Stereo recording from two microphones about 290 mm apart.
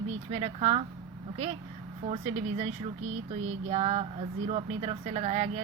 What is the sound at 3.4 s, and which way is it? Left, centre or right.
Speech, right.